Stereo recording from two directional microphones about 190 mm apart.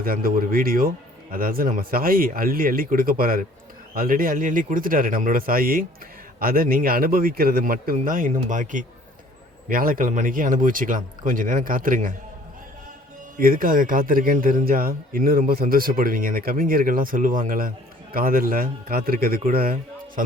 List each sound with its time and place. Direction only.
0.0 s a man's voice: 50° right (ahead or behind)
13.4 s a man's voice: 50° right (ahead or behind)